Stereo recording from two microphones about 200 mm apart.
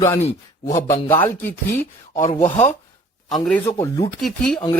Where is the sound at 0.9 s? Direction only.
10° left (ahead or behind).